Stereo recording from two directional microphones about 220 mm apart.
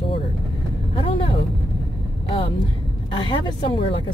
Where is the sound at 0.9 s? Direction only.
25° left (ahead or behind).